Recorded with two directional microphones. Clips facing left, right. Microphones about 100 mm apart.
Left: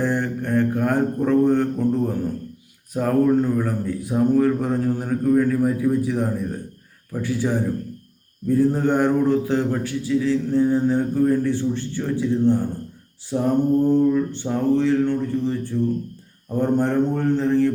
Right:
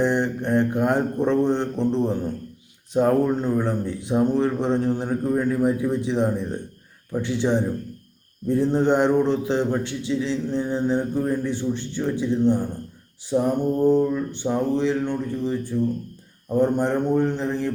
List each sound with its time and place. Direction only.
0.0 s a man's voice: 20° right (ahead or behind)
13.3 s mantra: 15° right (ahead or behind)